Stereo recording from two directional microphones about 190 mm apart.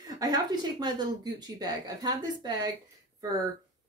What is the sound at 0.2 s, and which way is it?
Speech, 20° right (ahead or behind).